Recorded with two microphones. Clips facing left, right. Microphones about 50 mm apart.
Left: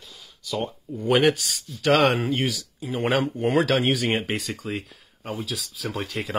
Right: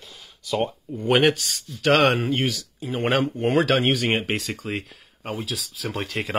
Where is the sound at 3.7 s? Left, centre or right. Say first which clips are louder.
Right 1 dB; right.